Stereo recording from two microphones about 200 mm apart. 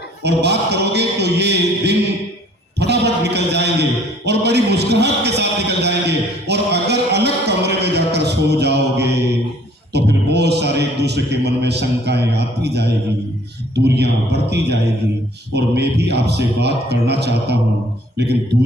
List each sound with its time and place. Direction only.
0.2 s a man's voice: 55° right (ahead or behind)
2.7 s a sound: 55° right (ahead or behind)
9.9 s a man's voice: 55° right (ahead or behind)